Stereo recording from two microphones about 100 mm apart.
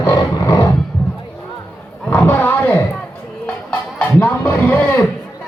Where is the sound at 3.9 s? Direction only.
20° left (ahead or behind).